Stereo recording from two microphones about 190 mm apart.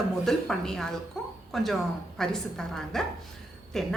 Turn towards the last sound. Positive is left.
turn(degrees=0)  # may be behind; listen again after turning